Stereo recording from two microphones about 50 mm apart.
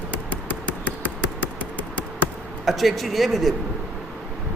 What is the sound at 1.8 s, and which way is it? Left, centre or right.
Insect, left.